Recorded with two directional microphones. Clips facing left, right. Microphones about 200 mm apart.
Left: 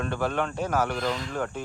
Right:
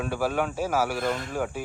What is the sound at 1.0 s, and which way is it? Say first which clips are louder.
Speech: right 1 dB; 55° right (ahead or behind).